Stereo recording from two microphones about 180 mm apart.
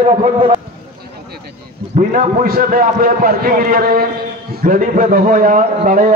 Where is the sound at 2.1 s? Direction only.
50° right (ahead or behind).